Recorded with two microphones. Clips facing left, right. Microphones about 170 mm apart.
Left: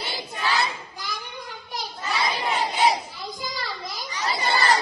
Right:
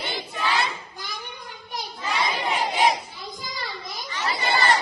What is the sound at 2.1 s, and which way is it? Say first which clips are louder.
Battle cry: even; 35° left (ahead or behind).